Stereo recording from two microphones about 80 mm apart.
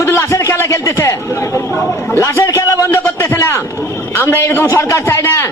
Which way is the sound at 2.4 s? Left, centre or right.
Left.